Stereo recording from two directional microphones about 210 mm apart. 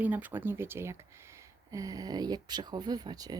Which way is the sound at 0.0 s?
10° right (ahead or behind).